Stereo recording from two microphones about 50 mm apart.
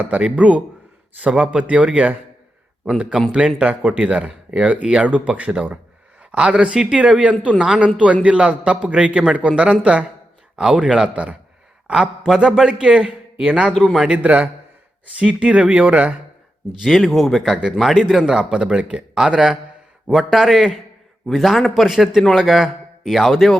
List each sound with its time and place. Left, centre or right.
0.2 s a man's voice: right
3.3 s a man's voice: right
11.1 s a man's voice: right
12.4 s speech: centre
13.4 s speech: right
13.7 s a man's voice: centre
14.2 s a man's voice: right
16.8 s a man's voice: centre